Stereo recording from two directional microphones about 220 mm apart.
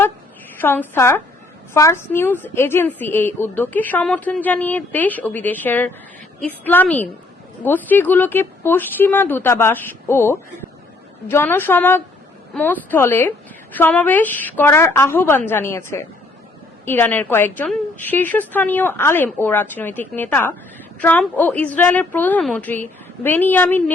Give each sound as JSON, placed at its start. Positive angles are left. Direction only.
{"t": 0.6, "sound": "a woman's voice", "side_deg": 10}